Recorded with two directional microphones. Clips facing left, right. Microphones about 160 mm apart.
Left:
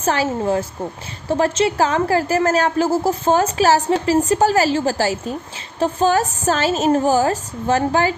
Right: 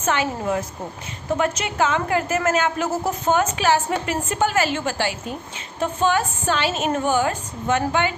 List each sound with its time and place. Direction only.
0.0 s a woman's voice: 35° left (ahead or behind)